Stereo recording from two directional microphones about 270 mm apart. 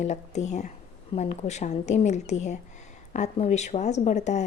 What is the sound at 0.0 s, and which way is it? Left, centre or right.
A woman's voice, left.